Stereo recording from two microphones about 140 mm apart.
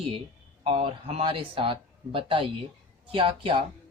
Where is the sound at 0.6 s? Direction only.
45° right (ahead or behind).